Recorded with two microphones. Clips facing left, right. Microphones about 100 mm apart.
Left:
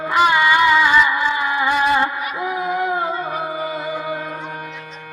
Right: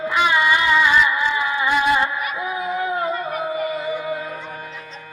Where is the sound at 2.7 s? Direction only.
60° left (ahead or behind).